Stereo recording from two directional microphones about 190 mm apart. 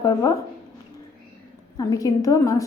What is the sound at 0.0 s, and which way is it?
Speech, 15° left (ahead or behind).